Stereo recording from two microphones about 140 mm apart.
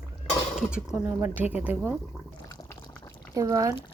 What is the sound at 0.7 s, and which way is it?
Speech, 5° right (ahead or behind).